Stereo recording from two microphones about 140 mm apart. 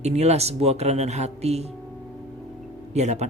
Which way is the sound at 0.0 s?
50° right (ahead or behind).